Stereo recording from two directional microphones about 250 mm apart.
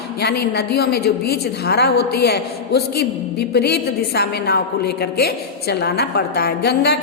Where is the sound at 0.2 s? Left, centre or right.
Left.